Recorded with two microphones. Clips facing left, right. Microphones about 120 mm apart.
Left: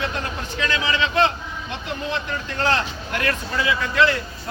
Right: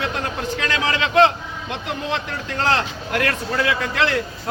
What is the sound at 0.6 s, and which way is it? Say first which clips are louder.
A man's voice: left 1 dB; 75° right (ahead or behind).